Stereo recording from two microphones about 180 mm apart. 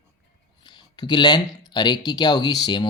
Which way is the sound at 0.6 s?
25° left (ahead or behind).